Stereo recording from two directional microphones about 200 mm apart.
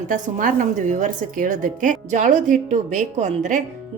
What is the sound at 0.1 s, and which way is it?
A woman's voice, 40° right (ahead or behind).